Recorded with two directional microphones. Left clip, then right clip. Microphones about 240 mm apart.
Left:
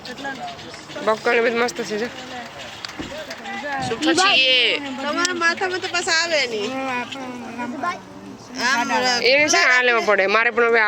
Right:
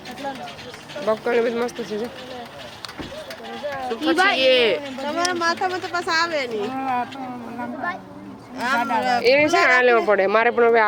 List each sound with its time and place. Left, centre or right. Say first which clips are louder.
1.0 s speech: left 2 dB; centre
3.8 s speech: left 1 dB; right
5.3 s speech: left 1 dB; right
8.5 s speech: left 2 dB; right
9.2 s speech: even; centre